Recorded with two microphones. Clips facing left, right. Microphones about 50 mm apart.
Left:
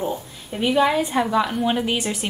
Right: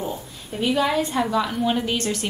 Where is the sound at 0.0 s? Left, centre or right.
Centre.